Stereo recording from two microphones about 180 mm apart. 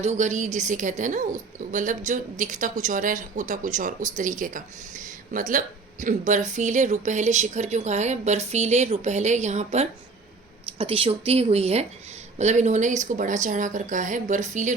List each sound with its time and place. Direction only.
0.0 s a woman's voice: 40° right (ahead or behind)